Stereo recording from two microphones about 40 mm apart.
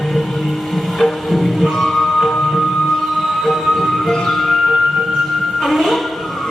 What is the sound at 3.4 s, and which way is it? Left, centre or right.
Music, centre.